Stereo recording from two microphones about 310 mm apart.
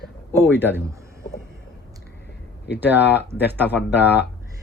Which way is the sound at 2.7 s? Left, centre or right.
Centre.